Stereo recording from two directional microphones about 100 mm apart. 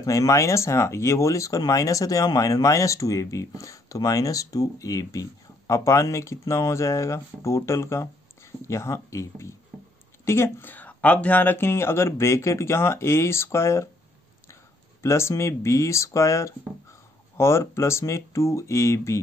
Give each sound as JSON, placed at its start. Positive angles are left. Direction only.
{"t": 0.0, "sound": "speech", "side_deg": 35}